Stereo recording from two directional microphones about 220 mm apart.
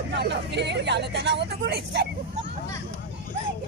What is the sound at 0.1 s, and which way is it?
Speech, 50° right (ahead or behind).